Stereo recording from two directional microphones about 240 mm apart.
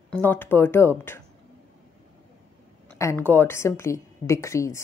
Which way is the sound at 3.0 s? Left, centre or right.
Centre.